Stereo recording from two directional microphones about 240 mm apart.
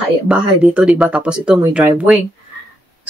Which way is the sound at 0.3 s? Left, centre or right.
Centre.